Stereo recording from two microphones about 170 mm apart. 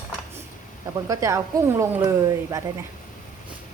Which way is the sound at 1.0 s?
15° right (ahead or behind).